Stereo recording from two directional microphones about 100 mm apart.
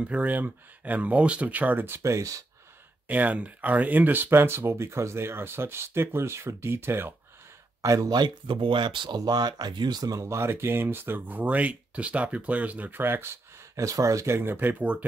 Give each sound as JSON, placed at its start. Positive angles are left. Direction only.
{"t": 0.0, "sound": "speech", "side_deg": -15}
{"t": 3.1, "sound": "speech", "side_deg": -15}
{"t": 7.8, "sound": "speech", "side_deg": -35}